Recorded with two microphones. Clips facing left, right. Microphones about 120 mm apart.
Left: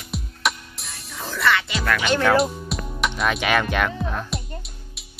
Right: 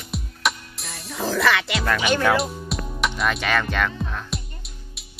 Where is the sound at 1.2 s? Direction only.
90° right.